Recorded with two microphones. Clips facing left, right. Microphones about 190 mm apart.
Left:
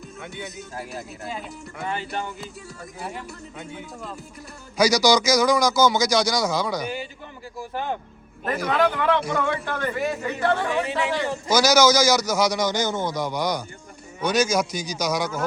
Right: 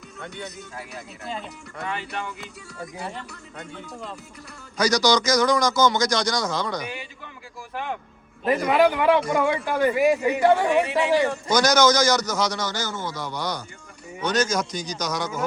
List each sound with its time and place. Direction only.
0.2 s speech: 5° left (ahead or behind)
1.9 s speech: 35° left (ahead or behind)
3.0 s a man's voice: 5° left (ahead or behind)
7.7 s speech: 30° left (ahead or behind)
8.6 s speech: 10° right (ahead or behind)
11.4 s a man's voice: 5° left (ahead or behind)